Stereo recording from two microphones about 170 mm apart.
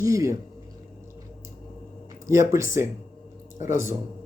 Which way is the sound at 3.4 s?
45° left (ahead or behind).